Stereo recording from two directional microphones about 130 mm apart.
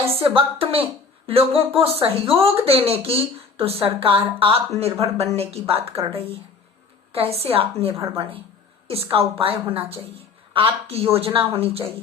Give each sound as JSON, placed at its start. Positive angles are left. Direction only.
{"t": 0.2, "sound": "speech", "side_deg": -45}
{"t": 7.1, "sound": "speech", "side_deg": -50}
{"t": 7.9, "sound": "speech", "side_deg": -25}
{"t": 8.9, "sound": "speech", "side_deg": -50}